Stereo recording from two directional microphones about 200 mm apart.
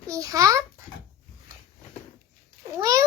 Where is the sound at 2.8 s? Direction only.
15° right (ahead or behind).